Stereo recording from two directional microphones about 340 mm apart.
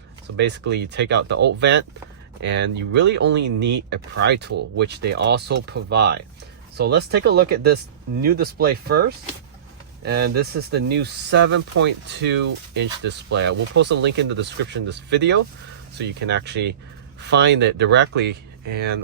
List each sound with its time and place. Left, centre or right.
0.3 s speech: right